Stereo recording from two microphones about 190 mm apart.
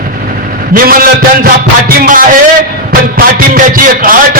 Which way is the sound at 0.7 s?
50° right (ahead or behind).